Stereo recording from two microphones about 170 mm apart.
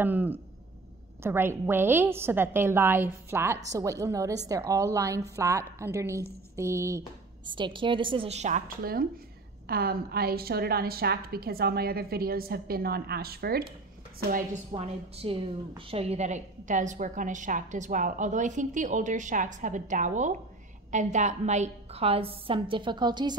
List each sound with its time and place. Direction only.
0.0 s a woman's voice: 10° right (ahead or behind)
7.5 s a woman's voice: 30° right (ahead or behind); by 13.7 s 65° right (ahead or behind)
14.7 s a woman's voice: 35° right (ahead or behind)